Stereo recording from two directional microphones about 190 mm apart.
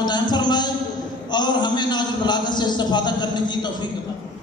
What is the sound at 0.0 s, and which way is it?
A man's voice, 25° left (ahead or behind).